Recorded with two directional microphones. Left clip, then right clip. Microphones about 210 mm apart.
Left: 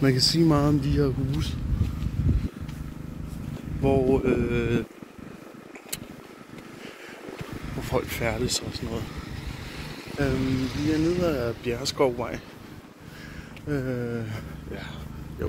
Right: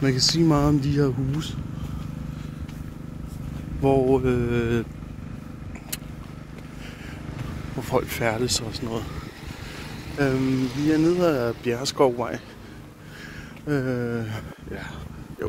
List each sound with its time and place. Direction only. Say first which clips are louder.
0.4 s speech: right 1 dB; 10° right (ahead or behind)
3.8 s speech: right 3 dB; 30° right (ahead or behind)
4.2 s speech: right 1 dB; 20° right (ahead or behind)
7.8 s speech: right 3 dB; 30° right (ahead or behind)
10.1 s speech: right 4 dB; 35° right (ahead or behind)
11.3 s speech: right 3 dB; 30° right (ahead or behind)
13.7 s speech: right 4 dB; 35° right (ahead or behind)